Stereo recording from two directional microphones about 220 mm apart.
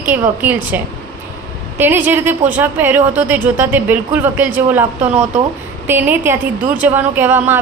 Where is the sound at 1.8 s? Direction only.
10° right (ahead or behind).